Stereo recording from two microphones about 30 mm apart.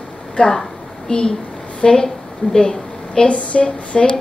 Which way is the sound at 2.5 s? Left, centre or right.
Centre.